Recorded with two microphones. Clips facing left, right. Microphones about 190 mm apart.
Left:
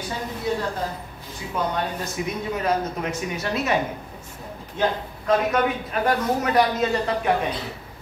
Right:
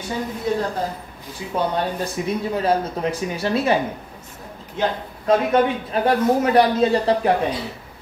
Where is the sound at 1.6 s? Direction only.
30° right (ahead or behind).